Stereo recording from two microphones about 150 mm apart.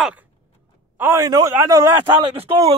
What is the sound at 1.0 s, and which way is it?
Speech, 20° right (ahead or behind).